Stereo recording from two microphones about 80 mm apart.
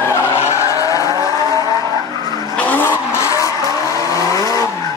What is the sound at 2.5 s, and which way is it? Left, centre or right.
Vehicle, left.